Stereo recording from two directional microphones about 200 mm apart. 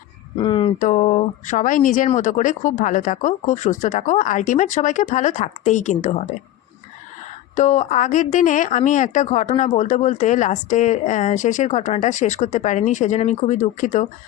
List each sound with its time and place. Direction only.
0.4 s a sound: 25° left (ahead or behind)
0.8 s speech: 35° left (ahead or behind)
7.5 s speech: 35° left (ahead or behind)